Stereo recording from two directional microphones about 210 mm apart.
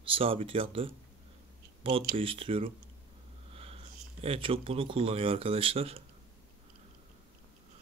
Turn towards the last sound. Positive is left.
turn(degrees=-25)  # may be behind; listen again after turning